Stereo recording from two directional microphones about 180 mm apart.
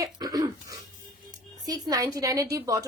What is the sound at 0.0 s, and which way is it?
Cough, 20° right (ahead or behind).